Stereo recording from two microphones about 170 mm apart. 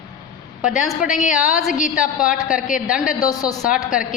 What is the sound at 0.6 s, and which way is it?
A woman's voice, 5° right (ahead or behind).